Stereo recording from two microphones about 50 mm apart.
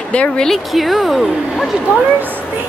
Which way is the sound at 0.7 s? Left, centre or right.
Centre.